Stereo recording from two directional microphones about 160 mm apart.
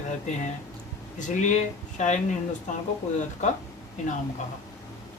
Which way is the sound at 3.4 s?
50° left (ahead or behind).